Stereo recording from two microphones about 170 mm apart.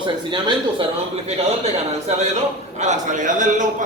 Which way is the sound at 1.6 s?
40° right (ahead or behind).